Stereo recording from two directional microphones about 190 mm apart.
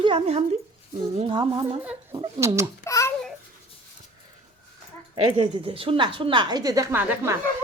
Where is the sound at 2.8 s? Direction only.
15° left (ahead or behind).